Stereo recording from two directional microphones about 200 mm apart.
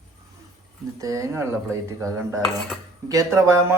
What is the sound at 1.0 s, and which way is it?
A man's voice, 15° right (ahead or behind).